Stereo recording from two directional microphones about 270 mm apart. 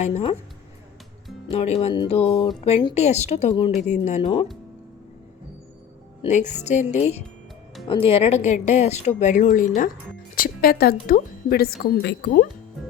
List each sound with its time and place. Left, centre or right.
0.0 s a woman's voice: left
1.5 s a woman's voice: left
6.2 s a woman's voice: left